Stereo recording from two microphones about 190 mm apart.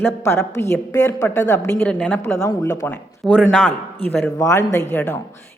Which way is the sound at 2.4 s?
15° left (ahead or behind).